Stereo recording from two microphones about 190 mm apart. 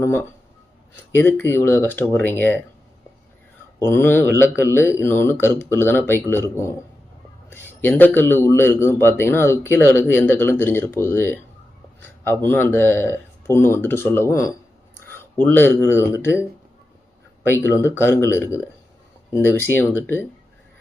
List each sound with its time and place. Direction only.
0.0 s a man's voice: 15° left (ahead or behind)
3.8 s a man's voice: 10° left (ahead or behind)
17.7 s a man's voice: 15° left (ahead or behind)